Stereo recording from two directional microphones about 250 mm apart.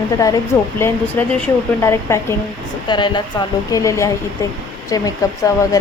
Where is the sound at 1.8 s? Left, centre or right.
Centre.